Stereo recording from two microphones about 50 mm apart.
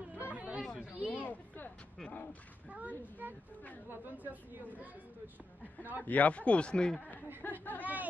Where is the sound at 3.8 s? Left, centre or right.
Right.